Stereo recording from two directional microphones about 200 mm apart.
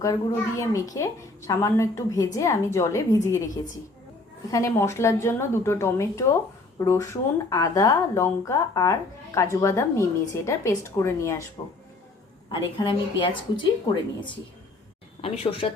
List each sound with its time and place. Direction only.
0.0 s a woman's voice: 15° left (ahead or behind)
4.5 s a woman's voice: 15° left (ahead or behind)
12.5 s a woman's voice: 25° left (ahead or behind)